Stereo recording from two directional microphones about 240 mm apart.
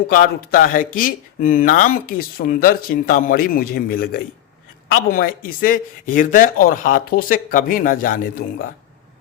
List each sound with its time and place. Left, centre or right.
0.1 s speech: left